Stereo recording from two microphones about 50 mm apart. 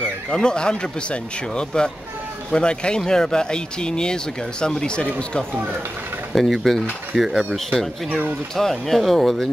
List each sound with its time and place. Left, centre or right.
0.3 s speech: centre
5.5 s speech: right
6.3 s speech: centre